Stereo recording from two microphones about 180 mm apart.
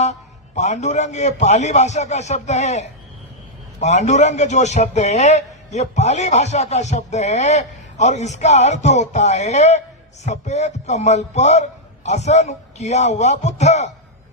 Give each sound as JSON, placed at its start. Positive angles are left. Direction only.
{"t": 0.0, "sound": "a man's voice", "side_deg": 40}